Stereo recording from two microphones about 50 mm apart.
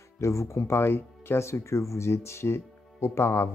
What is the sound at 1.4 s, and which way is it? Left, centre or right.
Speech, left.